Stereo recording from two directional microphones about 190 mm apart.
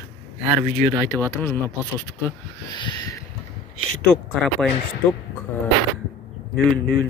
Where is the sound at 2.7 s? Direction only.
20° left (ahead or behind).